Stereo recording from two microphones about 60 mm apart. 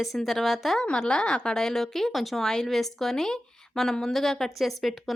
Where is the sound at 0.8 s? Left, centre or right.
Centre.